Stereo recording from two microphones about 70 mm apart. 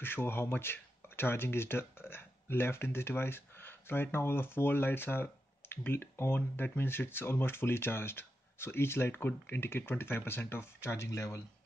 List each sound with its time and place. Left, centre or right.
0.0 s speech: left